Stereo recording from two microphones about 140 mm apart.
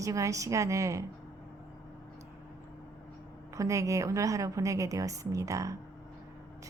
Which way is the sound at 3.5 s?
20° right (ahead or behind).